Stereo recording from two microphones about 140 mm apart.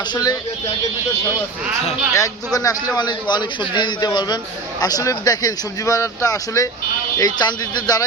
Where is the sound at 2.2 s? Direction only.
25° left (ahead or behind).